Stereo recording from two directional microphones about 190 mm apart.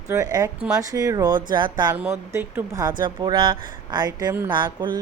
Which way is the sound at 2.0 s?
10° right (ahead or behind).